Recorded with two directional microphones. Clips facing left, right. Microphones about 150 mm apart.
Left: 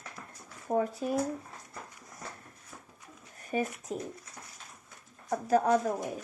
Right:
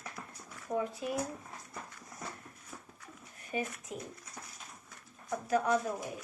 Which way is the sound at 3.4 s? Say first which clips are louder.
Left 5 dB; 40° left (ahead or behind).